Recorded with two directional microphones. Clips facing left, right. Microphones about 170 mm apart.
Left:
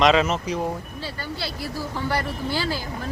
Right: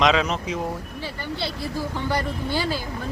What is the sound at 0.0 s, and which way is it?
Speech, centre (ahead or behind).